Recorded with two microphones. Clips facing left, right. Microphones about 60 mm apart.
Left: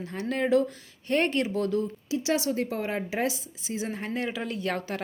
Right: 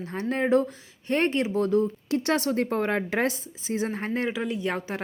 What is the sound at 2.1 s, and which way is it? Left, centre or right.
A woman's voice, right.